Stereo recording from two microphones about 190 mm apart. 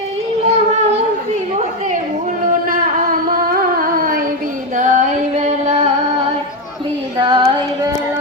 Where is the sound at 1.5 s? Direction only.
40° right (ahead or behind).